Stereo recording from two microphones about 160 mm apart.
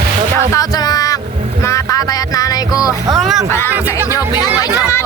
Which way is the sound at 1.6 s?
20° left (ahead or behind).